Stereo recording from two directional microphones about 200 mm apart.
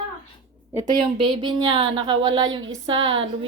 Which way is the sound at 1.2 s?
25° right (ahead or behind).